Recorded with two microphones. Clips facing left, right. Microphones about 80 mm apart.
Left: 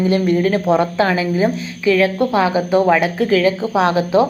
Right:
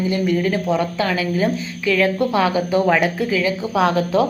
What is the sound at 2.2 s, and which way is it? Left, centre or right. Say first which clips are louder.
Speech: left 2 dB; left.